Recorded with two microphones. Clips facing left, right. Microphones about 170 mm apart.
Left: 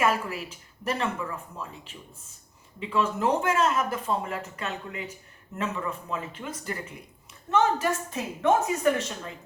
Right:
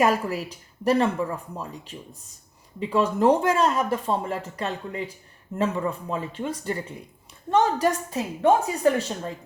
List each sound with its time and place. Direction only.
0.0 s speech: 40° right (ahead or behind)